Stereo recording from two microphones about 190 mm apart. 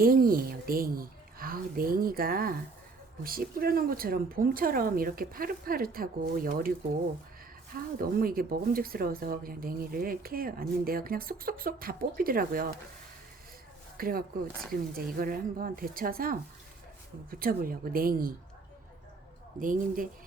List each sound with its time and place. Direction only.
0.0 s speech: 50° right (ahead or behind)
13.9 s speech: 50° right (ahead or behind)
17.4 s speech: 50° right (ahead or behind)
19.5 s speech: 45° right (ahead or behind)